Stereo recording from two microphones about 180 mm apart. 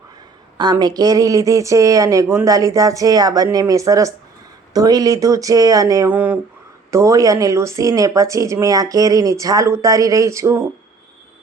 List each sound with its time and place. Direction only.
0.5 s speech: 25° right (ahead or behind)
6.1 s speech: 10° right (ahead or behind)